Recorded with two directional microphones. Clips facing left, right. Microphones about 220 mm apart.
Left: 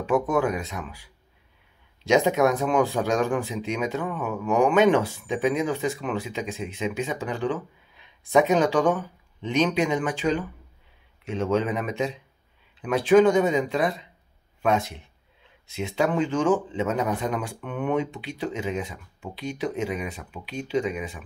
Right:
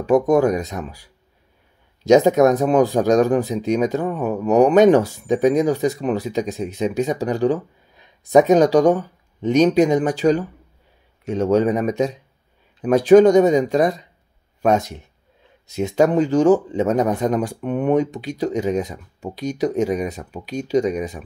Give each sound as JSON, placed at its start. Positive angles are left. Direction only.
{"t": 0.0, "sound": "speech", "side_deg": -40}